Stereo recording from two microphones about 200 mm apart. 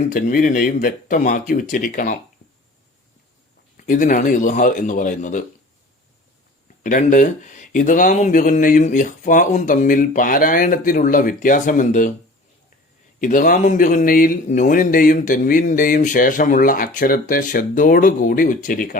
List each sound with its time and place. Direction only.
0.1 s speech: 40° left (ahead or behind)
3.8 s speech: 40° left (ahead or behind)
6.8 s speech: 40° left (ahead or behind)
13.1 s speech: 40° left (ahead or behind)